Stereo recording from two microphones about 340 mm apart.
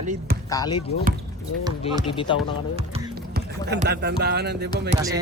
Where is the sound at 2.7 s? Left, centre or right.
Centre.